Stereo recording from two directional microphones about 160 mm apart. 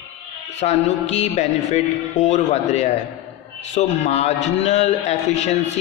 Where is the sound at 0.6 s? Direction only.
45° left (ahead or behind).